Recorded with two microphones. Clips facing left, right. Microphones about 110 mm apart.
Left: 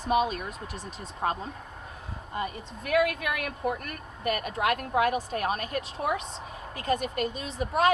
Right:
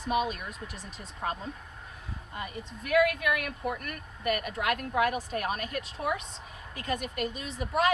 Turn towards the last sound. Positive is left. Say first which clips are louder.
# left 3 dB
turn(degrees=30)  # may be behind; listen again after turning